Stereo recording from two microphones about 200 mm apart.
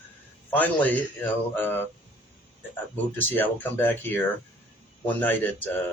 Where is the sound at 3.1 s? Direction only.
10° left (ahead or behind).